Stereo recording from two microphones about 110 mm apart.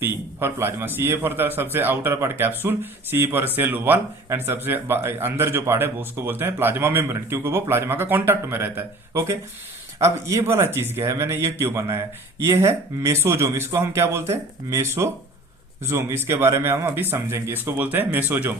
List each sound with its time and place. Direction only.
0.0 s a man's voice: 20° right (ahead or behind)